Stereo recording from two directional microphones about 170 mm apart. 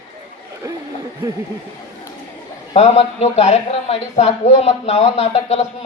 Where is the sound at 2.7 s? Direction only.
40° left (ahead or behind).